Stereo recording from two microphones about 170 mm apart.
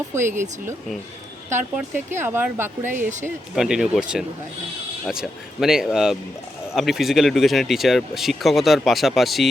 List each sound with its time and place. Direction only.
0.3 s speech: 45° right (ahead or behind)
1.5 s speech: 10° right (ahead or behind)